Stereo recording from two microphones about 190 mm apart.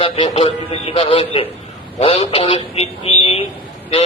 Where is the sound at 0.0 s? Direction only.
30° left (ahead or behind).